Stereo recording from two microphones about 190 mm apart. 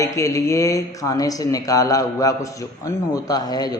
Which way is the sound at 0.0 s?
15° left (ahead or behind).